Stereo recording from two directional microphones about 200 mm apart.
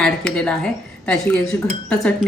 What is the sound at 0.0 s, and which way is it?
Speech, 5° left (ahead or behind).